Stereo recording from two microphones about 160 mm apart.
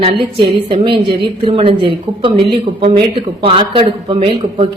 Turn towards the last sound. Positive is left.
turn(degrees=-35)  # may be behind; listen again after turning